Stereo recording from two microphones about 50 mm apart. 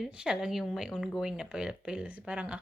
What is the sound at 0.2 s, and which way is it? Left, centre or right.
Speech, centre.